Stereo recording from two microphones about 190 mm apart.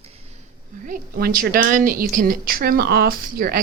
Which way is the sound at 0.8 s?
50° right (ahead or behind).